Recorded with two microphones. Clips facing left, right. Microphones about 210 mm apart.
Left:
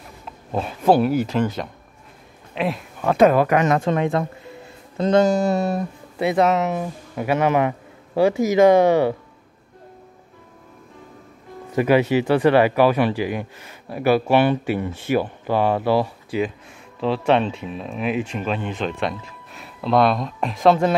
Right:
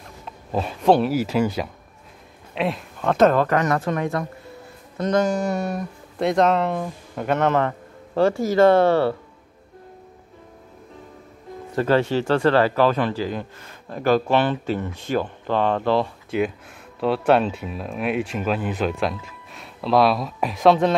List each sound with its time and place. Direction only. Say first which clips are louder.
0.2 s speech: even; centre (ahead or behind); by 5.9 s 30° left (ahead or behind)
6.1 s speech: even; 5° left (ahead or behind)
11.7 s speech: left 2 dB; 15° left (ahead or behind)
17.0 s speech: right 1 dB; centre (ahead or behind)